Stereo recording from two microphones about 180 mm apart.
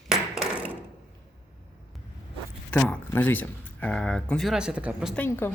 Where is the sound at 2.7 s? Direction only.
10° left (ahead or behind).